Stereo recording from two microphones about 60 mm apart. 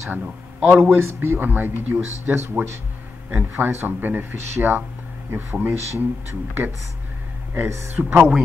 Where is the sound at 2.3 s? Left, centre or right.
Right.